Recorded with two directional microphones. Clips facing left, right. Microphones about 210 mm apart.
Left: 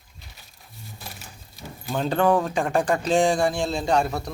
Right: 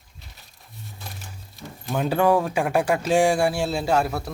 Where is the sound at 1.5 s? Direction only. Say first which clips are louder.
Right 1 dB; 5° right (ahead or behind).